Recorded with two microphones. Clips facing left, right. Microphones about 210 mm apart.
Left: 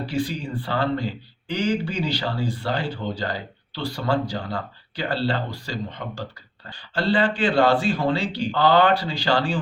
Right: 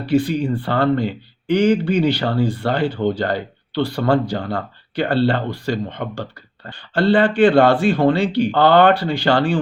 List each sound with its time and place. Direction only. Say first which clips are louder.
0.0 s speech: right 8 dB; 60° right (ahead or behind)